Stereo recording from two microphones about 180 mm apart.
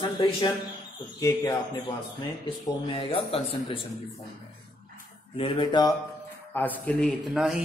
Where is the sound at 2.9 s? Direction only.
30° left (ahead or behind).